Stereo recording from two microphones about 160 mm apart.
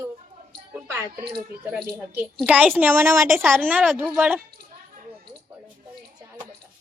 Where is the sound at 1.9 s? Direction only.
10° right (ahead or behind).